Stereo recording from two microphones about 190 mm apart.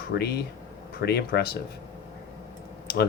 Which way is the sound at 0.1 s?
55° left (ahead or behind).